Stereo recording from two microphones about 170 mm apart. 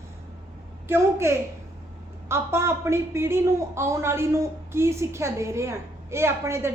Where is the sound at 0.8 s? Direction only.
15° right (ahead or behind).